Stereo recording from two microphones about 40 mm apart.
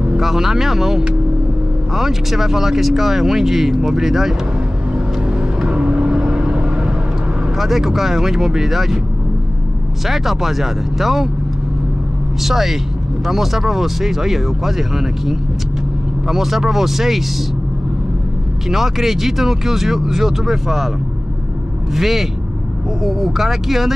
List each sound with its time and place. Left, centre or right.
0.2 s speech: centre
4.9 s vehicle: centre
7.5 s speech: centre
10.0 s speech: centre
12.4 s speech: centre
18.7 s speech: centre
21.9 s speech: centre